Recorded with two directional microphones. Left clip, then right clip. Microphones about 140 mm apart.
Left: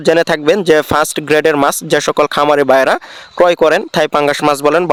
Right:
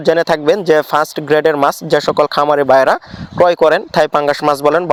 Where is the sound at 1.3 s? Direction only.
55° left (ahead or behind).